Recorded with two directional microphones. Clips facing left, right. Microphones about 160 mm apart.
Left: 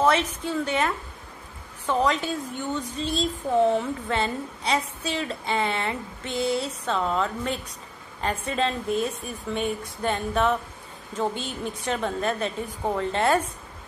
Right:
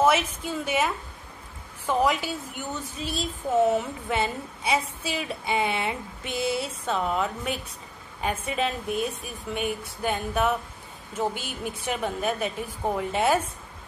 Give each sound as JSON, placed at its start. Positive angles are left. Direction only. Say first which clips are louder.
{"t": 0.0, "sound": "a woman's voice", "louder": "even", "side_deg": -10}